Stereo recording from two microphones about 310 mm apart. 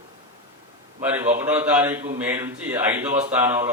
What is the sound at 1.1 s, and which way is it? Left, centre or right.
Speech, centre.